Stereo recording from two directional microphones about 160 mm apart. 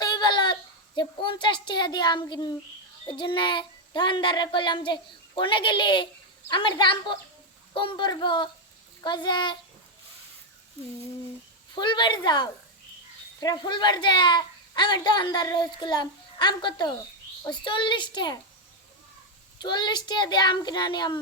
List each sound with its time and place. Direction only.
0.0 s a sound: 25° left (ahead or behind)
0.9 s a child's voice: 30° left (ahead or behind)
11.7 s a child's voice: 30° left (ahead or behind)
19.6 s a child's voice: 30° left (ahead or behind)